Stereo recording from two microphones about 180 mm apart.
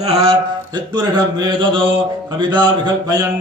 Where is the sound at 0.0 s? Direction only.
35° right (ahead or behind).